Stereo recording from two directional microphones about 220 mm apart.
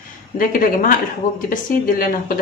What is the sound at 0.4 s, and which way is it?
Speech, 40° left (ahead or behind).